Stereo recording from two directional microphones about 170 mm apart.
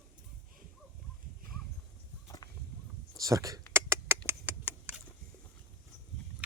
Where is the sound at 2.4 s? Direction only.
20° left (ahead or behind).